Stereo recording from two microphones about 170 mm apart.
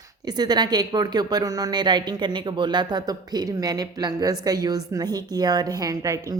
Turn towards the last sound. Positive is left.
turn(degrees=-20)  # may be behind; listen again after turning